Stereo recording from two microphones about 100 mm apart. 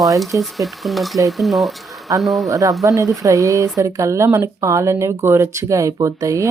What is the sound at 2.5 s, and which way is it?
Speech, 35° right (ahead or behind).